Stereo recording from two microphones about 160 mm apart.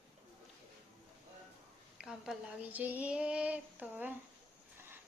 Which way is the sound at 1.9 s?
5° right (ahead or behind).